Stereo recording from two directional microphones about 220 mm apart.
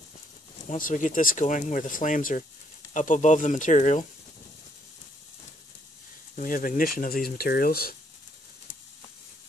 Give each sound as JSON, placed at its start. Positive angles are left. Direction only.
{"t": 0.7, "sound": "speech", "side_deg": 35}
{"t": 6.3, "sound": "speech", "side_deg": 40}